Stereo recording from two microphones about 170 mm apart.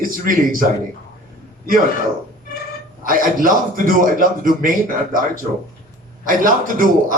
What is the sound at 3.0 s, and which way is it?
A man's voice, 55° right (ahead or behind).